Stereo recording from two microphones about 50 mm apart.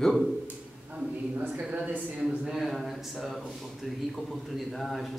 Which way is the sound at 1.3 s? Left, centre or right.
Right.